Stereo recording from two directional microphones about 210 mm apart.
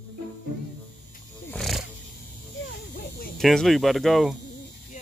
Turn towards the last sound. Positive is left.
turn(degrees=0)  # may be behind; listen again after turning